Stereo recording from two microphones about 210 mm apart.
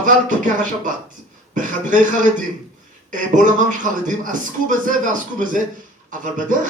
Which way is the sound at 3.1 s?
40° right (ahead or behind).